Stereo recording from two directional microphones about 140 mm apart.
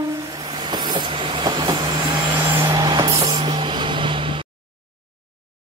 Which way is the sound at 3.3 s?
35° right (ahead or behind).